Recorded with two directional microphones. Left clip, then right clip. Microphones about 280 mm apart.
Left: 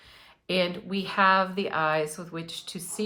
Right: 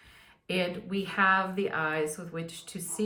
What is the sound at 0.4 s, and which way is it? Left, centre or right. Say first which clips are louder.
A woman's voice: left 4 dB; centre.